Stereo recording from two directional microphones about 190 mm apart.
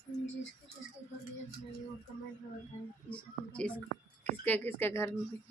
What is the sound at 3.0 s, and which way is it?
A woman's voice, 5° left (ahead or behind).